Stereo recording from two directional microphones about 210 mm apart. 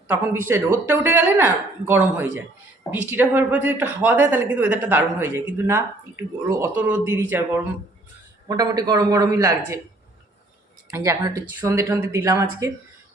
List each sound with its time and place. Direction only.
0.1 s speech: 10° right (ahead or behind)
10.9 s speech: 15° right (ahead or behind)